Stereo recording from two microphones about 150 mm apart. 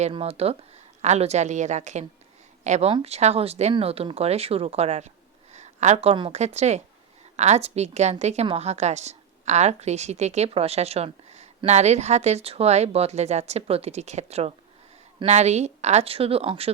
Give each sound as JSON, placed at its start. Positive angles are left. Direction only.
{"t": 0.0, "sound": "a woman's voice", "side_deg": -40}